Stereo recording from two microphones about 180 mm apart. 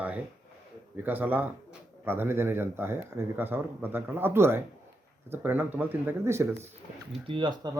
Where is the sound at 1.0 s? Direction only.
10° right (ahead or behind).